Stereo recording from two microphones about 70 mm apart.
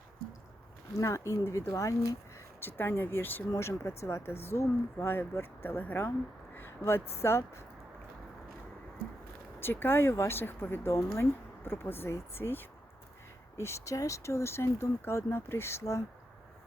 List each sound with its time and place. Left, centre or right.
0.9 s speech: left
2.6 s speech: left
3.5 s speech: left
6.8 s speech: left
9.6 s speech: left